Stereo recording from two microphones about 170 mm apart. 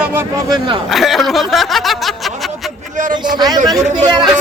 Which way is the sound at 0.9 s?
Centre (ahead or behind).